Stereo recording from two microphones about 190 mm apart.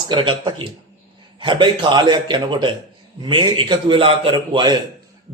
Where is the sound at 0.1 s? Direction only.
25° right (ahead or behind).